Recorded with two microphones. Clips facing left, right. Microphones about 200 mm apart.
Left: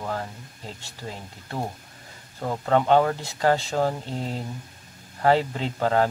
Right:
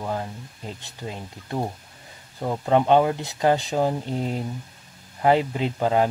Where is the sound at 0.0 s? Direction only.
15° right (ahead or behind).